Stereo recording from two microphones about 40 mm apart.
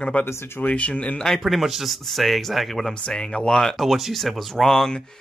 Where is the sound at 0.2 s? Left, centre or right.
Left.